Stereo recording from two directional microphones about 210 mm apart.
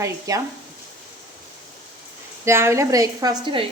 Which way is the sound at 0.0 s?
15° right (ahead or behind).